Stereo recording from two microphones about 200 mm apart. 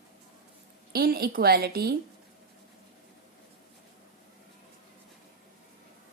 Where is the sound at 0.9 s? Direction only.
50° right (ahead or behind).